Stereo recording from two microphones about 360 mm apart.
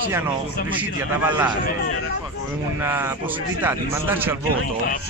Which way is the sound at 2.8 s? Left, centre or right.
Centre.